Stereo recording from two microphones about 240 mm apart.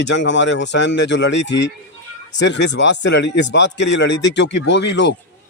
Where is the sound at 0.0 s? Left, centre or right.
Left.